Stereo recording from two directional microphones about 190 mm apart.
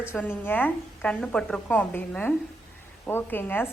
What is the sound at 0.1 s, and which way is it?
A woman's voice, 10° left (ahead or behind).